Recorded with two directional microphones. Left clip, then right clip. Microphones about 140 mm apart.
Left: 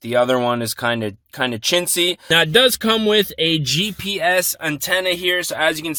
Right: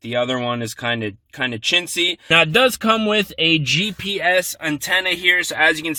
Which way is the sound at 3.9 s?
30° left (ahead or behind).